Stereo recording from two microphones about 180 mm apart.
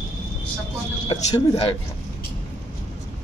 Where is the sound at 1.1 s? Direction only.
30° left (ahead or behind).